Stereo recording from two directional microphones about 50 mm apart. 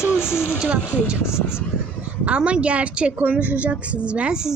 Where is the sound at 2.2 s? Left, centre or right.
Right.